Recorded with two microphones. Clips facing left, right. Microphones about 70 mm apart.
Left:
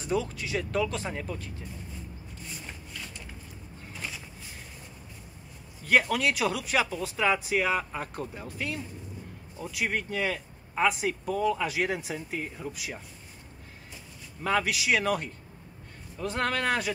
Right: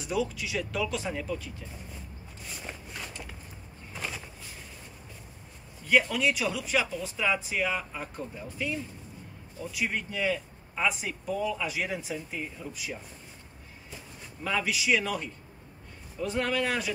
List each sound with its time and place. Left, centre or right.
0.0 s speech: left
5.9 s speech: left
9.7 s speech: left
14.4 s speech: left